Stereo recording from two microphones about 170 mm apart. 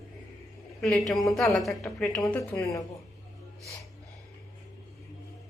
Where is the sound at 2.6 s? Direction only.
20° left (ahead or behind).